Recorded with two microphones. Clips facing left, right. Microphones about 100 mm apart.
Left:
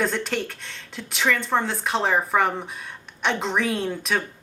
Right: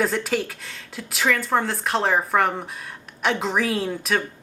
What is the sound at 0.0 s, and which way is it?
Speech, 5° right (ahead or behind).